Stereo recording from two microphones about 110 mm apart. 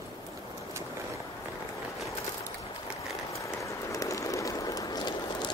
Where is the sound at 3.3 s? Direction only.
30° left (ahead or behind).